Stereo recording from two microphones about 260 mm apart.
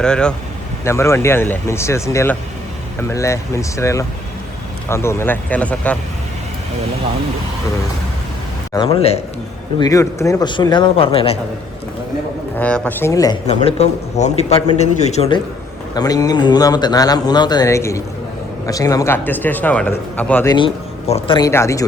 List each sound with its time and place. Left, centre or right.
0.0 s a man's voice: centre
8.7 s a man's voice: centre
9.8 s a man's voice: centre
12.5 s a man's voice: centre
13.5 s a man's voice: left